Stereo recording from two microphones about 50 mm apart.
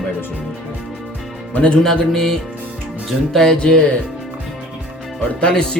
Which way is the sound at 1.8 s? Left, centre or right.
Centre.